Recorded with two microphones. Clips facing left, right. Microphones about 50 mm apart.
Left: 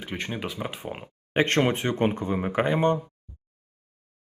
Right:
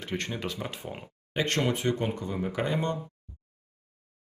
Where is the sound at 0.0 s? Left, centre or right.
Centre.